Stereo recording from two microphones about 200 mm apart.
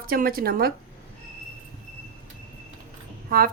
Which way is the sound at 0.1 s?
45° right (ahead or behind).